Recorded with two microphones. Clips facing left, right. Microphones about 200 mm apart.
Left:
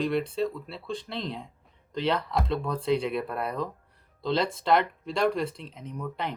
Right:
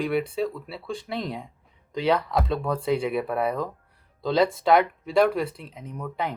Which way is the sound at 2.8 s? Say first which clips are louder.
Even; 5° right (ahead or behind).